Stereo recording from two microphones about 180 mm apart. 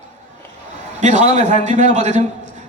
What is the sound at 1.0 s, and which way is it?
A man's voice, 40° right (ahead or behind).